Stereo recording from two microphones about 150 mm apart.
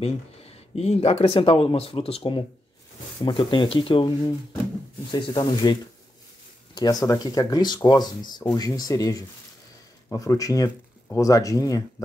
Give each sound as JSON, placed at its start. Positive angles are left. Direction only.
{"t": 0.0, "sound": "speech", "side_deg": 45}
{"t": 5.1, "sound": "speech", "side_deg": 30}